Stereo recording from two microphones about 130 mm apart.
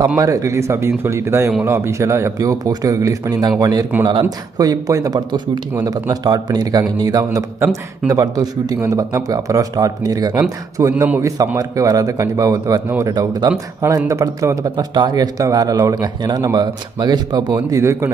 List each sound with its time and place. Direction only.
0.2 s a man's voice: 25° right (ahead or behind)